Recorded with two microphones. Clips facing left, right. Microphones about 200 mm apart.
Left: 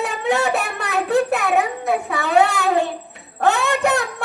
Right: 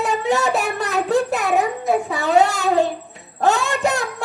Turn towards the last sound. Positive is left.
turn(degrees=60)  # may be behind; listen again after turning